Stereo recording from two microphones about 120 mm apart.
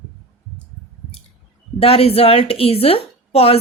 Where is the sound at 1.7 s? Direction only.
55° left (ahead or behind).